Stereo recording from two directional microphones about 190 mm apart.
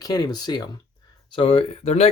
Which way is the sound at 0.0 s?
20° left (ahead or behind).